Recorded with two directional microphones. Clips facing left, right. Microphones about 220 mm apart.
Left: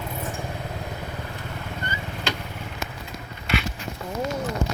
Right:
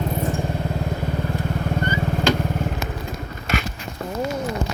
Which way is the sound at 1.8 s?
45° right (ahead or behind).